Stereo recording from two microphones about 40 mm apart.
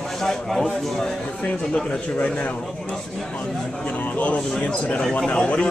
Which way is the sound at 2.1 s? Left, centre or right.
Left.